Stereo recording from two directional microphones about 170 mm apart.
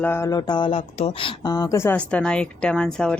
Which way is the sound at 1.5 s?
20° left (ahead or behind).